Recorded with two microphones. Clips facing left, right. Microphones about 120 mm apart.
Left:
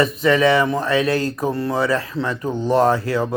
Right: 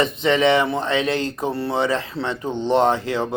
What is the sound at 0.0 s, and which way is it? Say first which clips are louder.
Speech: left 2 dB; 25° right (ahead or behind).